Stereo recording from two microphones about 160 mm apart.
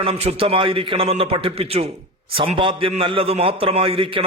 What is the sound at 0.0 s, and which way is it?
A man's voice, 40° right (ahead or behind).